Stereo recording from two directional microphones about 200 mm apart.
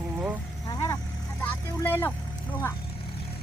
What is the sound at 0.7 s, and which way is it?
Vehicle, 15° left (ahead or behind).